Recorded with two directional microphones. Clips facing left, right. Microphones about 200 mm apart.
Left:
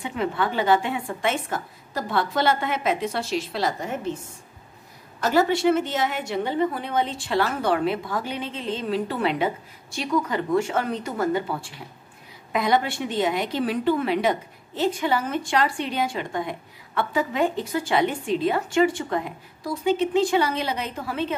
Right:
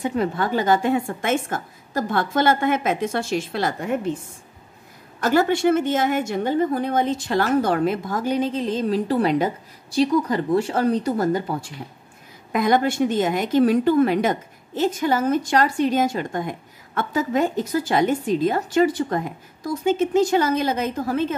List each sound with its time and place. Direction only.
0.0 s a woman's voice: 40° right (ahead or behind)
5.2 s a woman's voice: 50° right (ahead or behind)
12.5 s a woman's voice: 50° right (ahead or behind)